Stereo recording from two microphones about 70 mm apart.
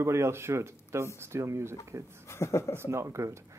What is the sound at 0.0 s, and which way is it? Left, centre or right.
A man's voice, right.